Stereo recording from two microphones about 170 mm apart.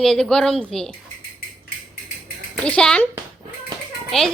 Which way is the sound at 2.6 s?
5° left (ahead or behind).